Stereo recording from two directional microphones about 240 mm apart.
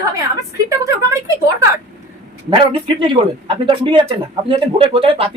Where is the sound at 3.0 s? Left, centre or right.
Right.